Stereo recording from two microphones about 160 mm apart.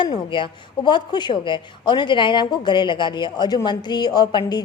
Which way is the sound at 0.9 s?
30° left (ahead or behind).